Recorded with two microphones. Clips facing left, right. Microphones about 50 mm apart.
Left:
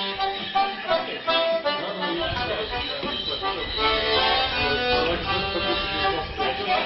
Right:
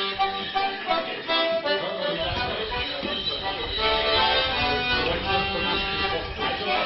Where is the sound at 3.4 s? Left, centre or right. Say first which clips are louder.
Left 3 dB; left.